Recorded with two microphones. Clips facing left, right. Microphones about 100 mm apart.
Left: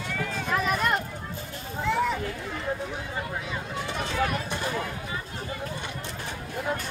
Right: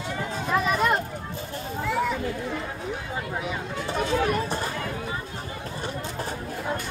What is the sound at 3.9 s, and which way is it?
Run, 35° right (ahead or behind).